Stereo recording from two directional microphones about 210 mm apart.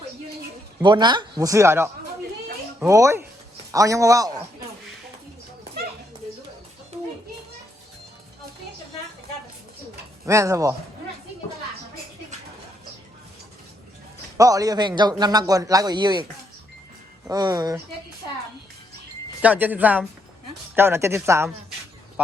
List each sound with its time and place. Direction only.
0.8 s speech: 20° right (ahead or behind)
10.2 s speech: 15° right (ahead or behind)
14.3 s speech: 15° right (ahead or behind)
17.2 s speech: 20° right (ahead or behind)
19.4 s speech: 5° right (ahead or behind)